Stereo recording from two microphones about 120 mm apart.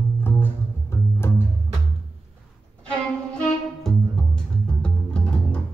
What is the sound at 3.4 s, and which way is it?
Music, 5° left (ahead or behind).